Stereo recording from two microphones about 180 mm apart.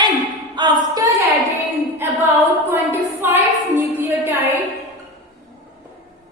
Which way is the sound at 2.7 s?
10° right (ahead or behind).